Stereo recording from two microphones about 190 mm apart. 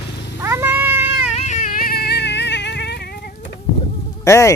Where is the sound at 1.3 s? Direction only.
35° left (ahead or behind); by 3.3 s 60° left (ahead or behind).